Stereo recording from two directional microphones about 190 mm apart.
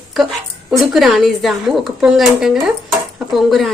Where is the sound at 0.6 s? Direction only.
5° right (ahead or behind).